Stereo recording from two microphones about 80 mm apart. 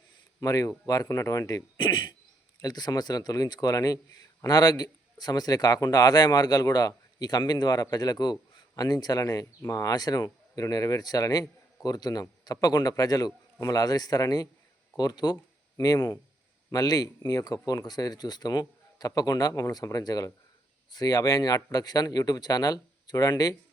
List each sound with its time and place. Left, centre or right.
0.3 s speech: left
1.8 s speech: left
2.6 s speech: left
16.0 s speech: left
16.7 s speech: left